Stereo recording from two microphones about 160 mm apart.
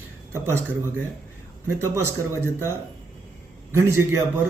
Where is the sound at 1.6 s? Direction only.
15° right (ahead or behind).